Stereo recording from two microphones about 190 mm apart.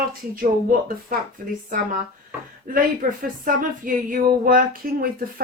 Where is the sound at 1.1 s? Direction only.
50° right (ahead or behind).